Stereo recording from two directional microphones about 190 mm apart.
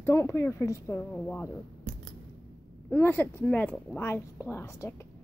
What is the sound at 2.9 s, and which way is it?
Speech, 10° left (ahead or behind).